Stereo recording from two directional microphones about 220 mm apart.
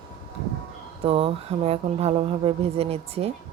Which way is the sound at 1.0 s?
25° right (ahead or behind).